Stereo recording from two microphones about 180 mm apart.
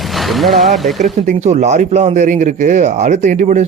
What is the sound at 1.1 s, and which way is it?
Speech, 40° right (ahead or behind).